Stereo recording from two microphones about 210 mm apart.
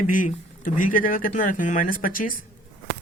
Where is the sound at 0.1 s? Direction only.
40° left (ahead or behind).